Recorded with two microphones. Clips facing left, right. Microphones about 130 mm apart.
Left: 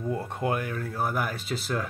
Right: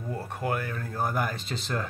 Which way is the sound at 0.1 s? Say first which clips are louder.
Left 1 dB; 20° left (ahead or behind).